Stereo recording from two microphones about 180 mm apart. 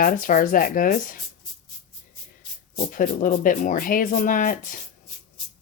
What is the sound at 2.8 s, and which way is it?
Speech, 50° left (ahead or behind).